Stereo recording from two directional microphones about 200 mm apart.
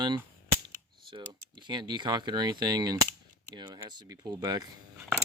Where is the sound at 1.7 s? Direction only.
20° right (ahead or behind).